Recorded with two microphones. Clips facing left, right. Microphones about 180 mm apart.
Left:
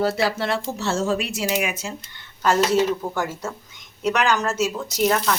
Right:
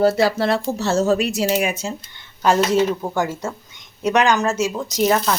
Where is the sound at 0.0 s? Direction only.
40° right (ahead or behind).